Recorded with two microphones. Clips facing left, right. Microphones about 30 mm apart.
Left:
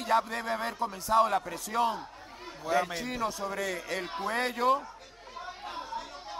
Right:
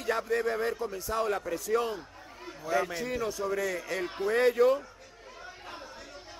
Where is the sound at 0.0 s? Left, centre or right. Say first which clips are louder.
Left 1 dB; left.